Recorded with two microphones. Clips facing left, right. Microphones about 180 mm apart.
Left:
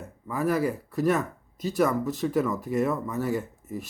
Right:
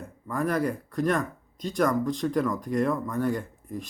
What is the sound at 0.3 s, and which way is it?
Speech, 5° left (ahead or behind).